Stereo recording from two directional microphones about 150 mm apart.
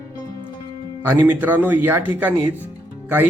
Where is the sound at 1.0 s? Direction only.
10° right (ahead or behind).